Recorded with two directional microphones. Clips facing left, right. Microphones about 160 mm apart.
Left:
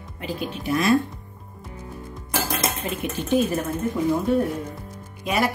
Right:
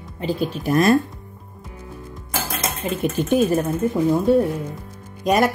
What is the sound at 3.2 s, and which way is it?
Speech, 50° right (ahead or behind).